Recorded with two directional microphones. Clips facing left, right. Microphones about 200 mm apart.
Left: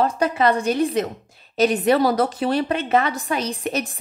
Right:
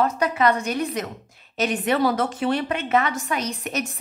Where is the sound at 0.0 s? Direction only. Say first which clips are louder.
Left 2 dB; 30° left (ahead or behind).